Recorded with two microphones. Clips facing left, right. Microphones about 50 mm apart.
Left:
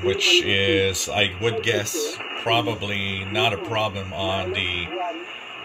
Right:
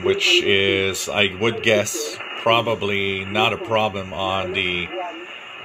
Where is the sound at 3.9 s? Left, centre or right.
Right.